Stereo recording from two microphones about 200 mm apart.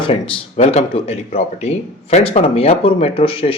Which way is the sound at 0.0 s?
30° left (ahead or behind).